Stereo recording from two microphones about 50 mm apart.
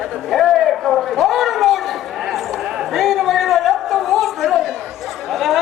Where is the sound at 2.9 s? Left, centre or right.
Centre.